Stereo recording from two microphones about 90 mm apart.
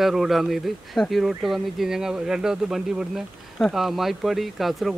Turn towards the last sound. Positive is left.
turn(degrees=0)  # may be behind; listen again after turning